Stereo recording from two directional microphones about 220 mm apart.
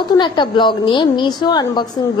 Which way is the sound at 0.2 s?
20° left (ahead or behind).